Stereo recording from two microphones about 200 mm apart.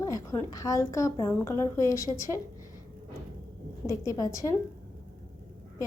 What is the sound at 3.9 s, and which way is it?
Speech, 15° left (ahead or behind).